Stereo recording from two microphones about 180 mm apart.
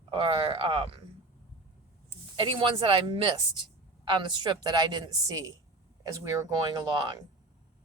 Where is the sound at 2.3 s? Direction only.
30° right (ahead or behind).